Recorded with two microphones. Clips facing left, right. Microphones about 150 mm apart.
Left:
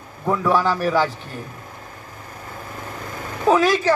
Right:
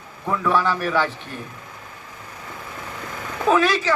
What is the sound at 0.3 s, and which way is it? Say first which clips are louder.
A man's voice: left 2 dB; 35° left (ahead or behind).